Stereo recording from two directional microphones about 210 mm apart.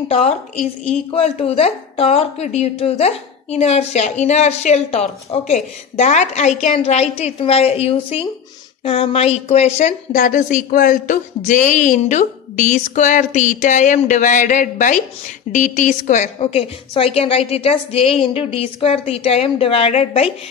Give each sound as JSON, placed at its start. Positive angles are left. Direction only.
{"t": 0.1, "sound": "a woman's voice", "side_deg": 30}